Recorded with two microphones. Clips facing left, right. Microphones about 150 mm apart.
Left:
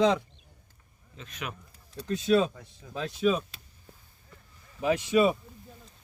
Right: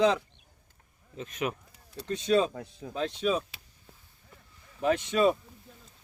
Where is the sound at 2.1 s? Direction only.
5° left (ahead or behind).